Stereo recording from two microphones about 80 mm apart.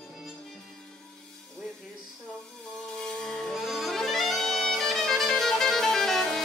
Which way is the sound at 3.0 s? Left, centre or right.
Centre.